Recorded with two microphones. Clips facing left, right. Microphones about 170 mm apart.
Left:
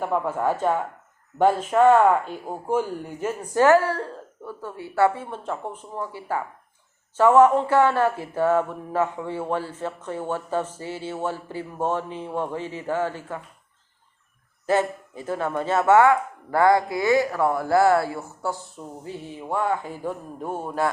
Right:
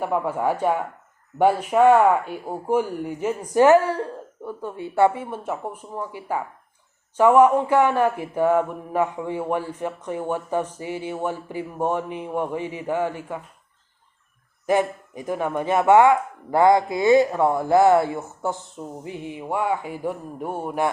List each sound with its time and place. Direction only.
0.0 s speech: 10° right (ahead or behind)
14.7 s speech: 15° right (ahead or behind)